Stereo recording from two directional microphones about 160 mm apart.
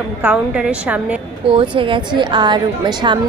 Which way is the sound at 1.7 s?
30° right (ahead or behind).